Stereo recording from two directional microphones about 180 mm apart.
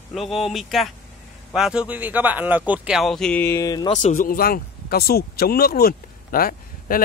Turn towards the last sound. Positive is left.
turn(degrees=55)  # may be behind; listen again after turning